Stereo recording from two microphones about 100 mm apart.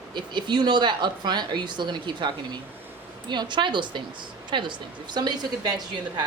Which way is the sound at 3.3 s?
50° right (ahead or behind).